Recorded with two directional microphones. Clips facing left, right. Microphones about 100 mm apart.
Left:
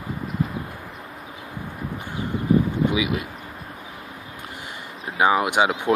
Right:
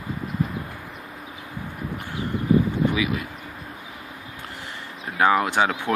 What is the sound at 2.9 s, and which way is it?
Speech, 20° left (ahead or behind).